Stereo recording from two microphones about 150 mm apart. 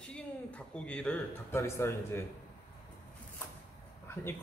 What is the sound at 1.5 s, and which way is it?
Speech, 20° left (ahead or behind).